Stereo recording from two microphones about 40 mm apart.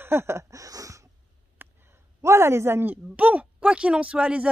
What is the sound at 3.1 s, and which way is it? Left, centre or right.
Speech, right.